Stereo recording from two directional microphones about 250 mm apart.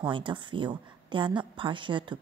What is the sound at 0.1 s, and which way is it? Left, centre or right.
A woman's voice, centre.